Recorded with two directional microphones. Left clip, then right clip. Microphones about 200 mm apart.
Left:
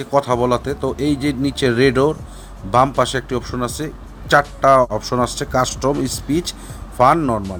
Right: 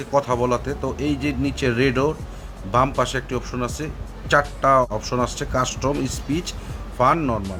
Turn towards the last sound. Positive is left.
turn(degrees=20)  # may be behind; listen again after turning